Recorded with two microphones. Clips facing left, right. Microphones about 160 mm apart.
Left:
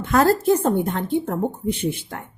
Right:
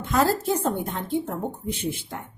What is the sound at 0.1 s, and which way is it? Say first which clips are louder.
Speech: left 5 dB; 60° left (ahead or behind).